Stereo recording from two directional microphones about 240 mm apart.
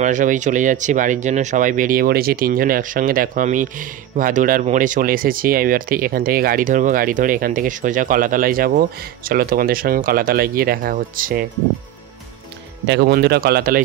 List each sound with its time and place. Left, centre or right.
0.0 s speech: right
12.8 s speech: right